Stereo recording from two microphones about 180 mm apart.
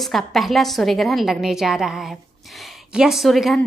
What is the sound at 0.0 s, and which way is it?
A woman's voice, centre (ahead or behind).